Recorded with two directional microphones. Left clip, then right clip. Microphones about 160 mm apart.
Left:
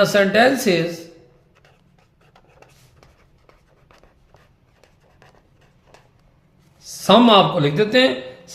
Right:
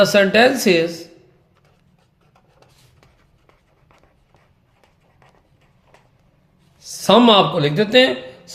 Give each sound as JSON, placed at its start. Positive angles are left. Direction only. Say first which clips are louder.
{"t": 0.0, "sound": "speech", "louder": "right 2 dB", "side_deg": -65}
{"t": 3.0, "sound": "writing", "louder": "left 2 dB", "side_deg": 20}
{"t": 5.9, "sound": "a sound", "louder": "left 2 dB", "side_deg": 25}
{"t": 6.7, "sound": "speech", "louder": "even", "side_deg": -65}